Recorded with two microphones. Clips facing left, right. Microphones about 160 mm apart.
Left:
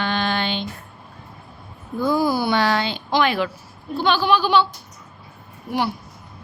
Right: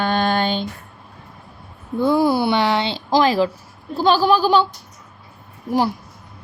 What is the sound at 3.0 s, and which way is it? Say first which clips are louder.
A woman's voice: right 5 dB; 35° right (ahead or behind).